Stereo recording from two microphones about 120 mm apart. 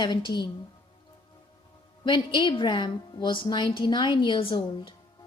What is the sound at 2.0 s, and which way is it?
A woman's voice, 40° left (ahead or behind).